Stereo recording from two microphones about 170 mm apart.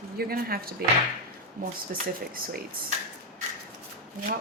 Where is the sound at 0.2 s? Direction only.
65° right (ahead or behind).